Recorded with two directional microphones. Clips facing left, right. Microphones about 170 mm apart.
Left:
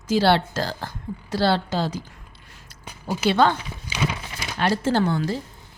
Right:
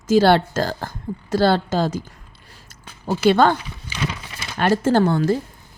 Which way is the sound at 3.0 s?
50° right (ahead or behind).